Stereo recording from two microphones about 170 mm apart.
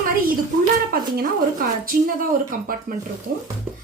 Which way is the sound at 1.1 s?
55° right (ahead or behind).